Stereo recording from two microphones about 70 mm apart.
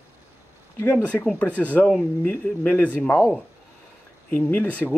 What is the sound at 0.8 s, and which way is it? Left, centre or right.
Speech, left.